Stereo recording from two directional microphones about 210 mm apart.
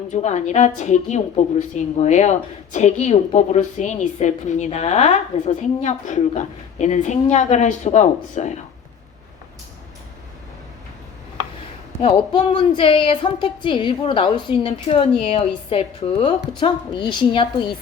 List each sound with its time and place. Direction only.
0.1 s a woman's voice: 35° left (ahead or behind)
12.0 s a woman's voice: 25° left (ahead or behind)